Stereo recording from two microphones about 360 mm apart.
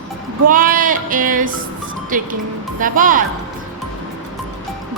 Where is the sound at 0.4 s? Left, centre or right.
Right.